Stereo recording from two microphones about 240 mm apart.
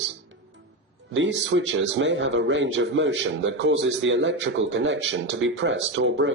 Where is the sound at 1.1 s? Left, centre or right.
Right.